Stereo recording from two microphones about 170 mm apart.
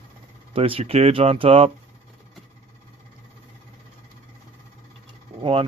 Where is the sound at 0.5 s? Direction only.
35° right (ahead or behind).